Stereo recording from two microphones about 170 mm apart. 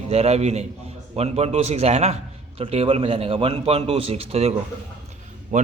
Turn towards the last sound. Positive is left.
turn(degrees=-45)  # may be behind; listen again after turning